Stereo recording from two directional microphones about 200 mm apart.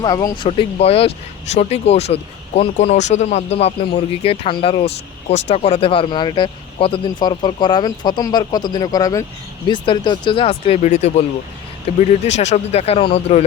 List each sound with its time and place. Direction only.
0.0 s speech: 20° left (ahead or behind)